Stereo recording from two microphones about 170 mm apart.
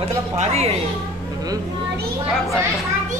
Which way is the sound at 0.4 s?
40° right (ahead or behind).